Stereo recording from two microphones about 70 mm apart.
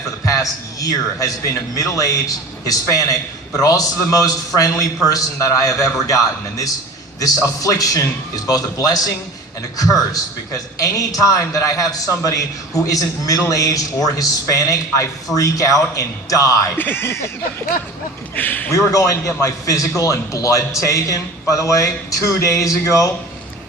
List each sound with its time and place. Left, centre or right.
0.3 s a man's voice: left
16.7 s a sound: left
18.3 s a man's voice: left
18.7 s a man's voice: left